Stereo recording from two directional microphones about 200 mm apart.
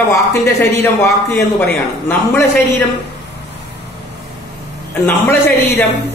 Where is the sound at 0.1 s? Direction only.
15° left (ahead or behind).